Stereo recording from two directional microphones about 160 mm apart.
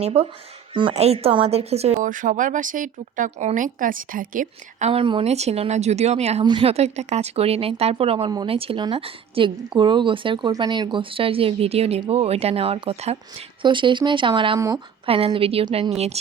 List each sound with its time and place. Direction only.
0.0 s a woman's voice: 40° right (ahead or behind)
2.0 s speech: 55° right (ahead or behind)
4.9 s a woman's voice: 35° right (ahead or behind)